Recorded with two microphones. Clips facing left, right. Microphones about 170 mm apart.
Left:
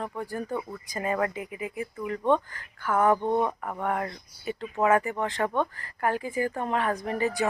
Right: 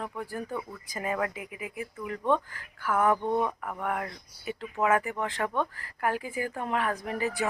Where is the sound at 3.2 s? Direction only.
30° left (ahead or behind).